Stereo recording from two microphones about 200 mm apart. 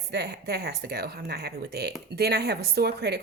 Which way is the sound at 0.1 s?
55° right (ahead or behind).